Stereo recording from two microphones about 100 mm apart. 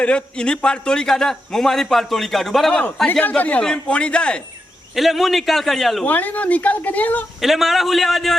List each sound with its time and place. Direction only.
0.0 s a man's voice: 10° left (ahead or behind)
3.1 s a man's voice: 15° left (ahead or behind)
4.9 s a man's voice: centre (ahead or behind)
6.1 s a man's voice: 15° left (ahead or behind)
7.4 s a man's voice: centre (ahead or behind)